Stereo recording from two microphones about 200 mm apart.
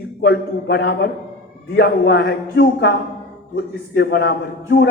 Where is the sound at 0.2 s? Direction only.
55° left (ahead or behind).